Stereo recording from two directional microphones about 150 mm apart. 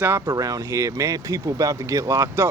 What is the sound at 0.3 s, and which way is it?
Speech, 25° right (ahead or behind).